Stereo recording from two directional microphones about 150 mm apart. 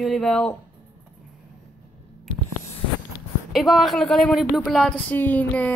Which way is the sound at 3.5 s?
Centre (ahead or behind).